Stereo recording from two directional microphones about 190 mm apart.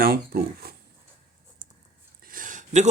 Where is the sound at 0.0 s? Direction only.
55° right (ahead or behind).